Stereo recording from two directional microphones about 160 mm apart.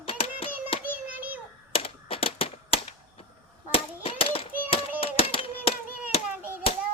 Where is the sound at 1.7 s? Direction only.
35° left (ahead or behind).